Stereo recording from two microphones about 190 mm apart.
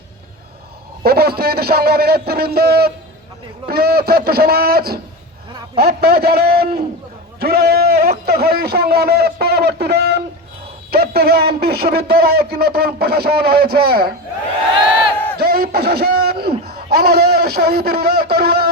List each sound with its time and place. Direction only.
1.0 s speech: 55° right (ahead or behind)
15.4 s a sound: 55° right (ahead or behind)
16.6 s a man's voice: 55° right (ahead or behind)